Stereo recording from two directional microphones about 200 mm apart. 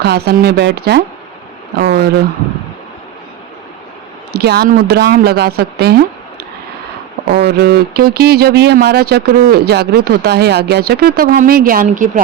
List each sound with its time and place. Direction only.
0.0 s speech: 55° right (ahead or behind)
4.3 s speech: 55° right (ahead or behind)
7.3 s speech: 55° right (ahead or behind)